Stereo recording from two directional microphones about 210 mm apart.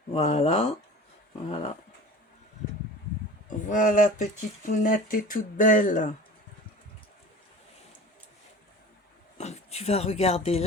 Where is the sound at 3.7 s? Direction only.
40° left (ahead or behind).